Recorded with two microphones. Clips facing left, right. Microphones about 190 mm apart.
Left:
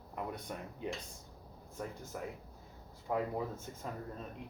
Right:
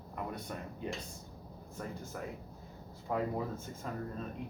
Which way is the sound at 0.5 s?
15° left (ahead or behind).